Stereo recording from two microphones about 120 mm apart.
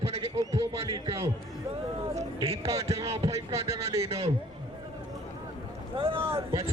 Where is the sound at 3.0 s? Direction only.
60° right (ahead or behind).